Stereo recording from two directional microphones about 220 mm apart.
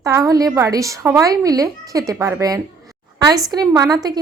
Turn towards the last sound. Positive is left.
turn(degrees=-15)  # may be behind; listen again after turning